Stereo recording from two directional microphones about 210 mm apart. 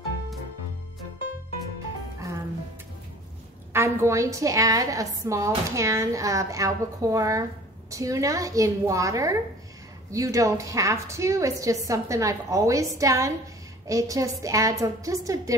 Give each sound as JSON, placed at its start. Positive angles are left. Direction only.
{"t": 3.7, "sound": "a woman's voice", "side_deg": -10}